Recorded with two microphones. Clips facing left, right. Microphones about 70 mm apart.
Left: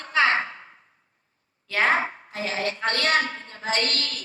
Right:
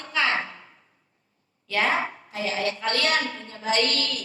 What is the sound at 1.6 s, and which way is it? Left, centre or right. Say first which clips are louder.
A woman's voice: left 2 dB; left.